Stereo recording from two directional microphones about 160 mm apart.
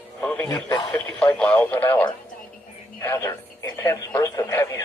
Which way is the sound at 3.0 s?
15° left (ahead or behind).